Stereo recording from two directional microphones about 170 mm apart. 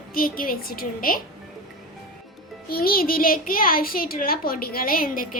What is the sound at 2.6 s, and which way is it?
A woman's voice, 60° left (ahead or behind).